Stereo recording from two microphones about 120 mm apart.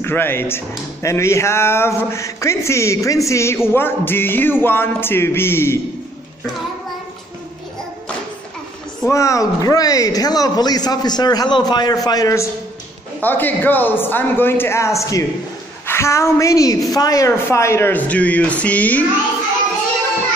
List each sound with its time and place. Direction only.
0.0 s speech: 20° left (ahead or behind)
9.1 s speech: 25° left (ahead or behind)
13.2 s speech: 15° left (ahead or behind)